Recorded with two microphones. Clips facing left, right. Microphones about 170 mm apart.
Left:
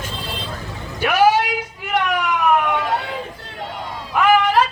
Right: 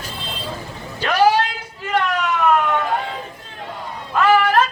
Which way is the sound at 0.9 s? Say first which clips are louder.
Left 1 dB; 10° left (ahead or behind).